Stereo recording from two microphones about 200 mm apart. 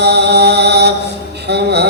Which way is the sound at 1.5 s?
55° right (ahead or behind).